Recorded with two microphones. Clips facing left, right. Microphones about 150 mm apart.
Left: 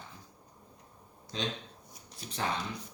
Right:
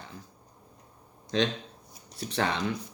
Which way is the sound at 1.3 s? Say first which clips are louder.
Right 9 dB; 75° right (ahead or behind).